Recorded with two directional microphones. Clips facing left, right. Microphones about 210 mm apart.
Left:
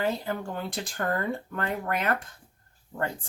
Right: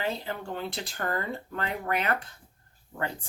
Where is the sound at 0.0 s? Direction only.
50° left (ahead or behind).